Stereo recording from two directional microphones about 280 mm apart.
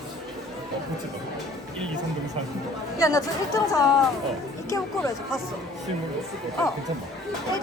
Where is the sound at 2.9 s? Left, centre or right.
Centre.